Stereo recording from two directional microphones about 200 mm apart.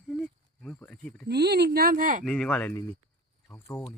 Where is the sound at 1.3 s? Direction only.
55° right (ahead or behind).